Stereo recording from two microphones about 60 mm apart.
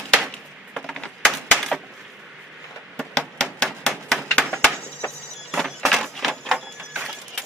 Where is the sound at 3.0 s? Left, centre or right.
Centre.